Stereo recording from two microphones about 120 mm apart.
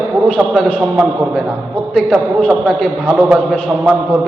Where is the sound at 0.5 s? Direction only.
Centre (ahead or behind).